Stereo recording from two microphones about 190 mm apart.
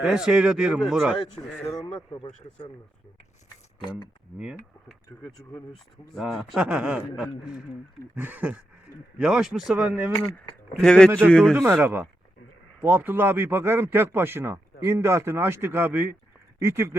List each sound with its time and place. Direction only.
0.0 s speech: 5° right (ahead or behind)
1.7 s a man's voice: 20° left (ahead or behind)
4.4 s speech: 5° right (ahead or behind)
6.1 s speech: centre (ahead or behind)
10.3 s speech: 5° left (ahead or behind)
11.5 s speech: 10° right (ahead or behind)